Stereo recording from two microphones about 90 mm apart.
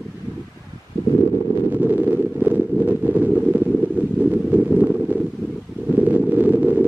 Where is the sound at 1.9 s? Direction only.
20° right (ahead or behind).